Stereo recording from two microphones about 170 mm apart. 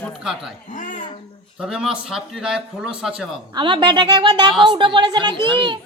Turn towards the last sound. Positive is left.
turn(degrees=-25)  # may be behind; listen again after turning